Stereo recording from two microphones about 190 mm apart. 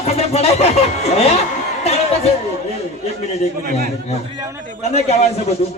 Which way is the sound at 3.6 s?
50° right (ahead or behind).